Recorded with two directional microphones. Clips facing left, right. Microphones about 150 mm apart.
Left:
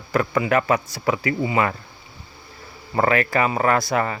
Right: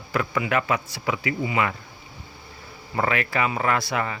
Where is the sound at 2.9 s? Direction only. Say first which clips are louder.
Left 5 dB; 45° left (ahead or behind).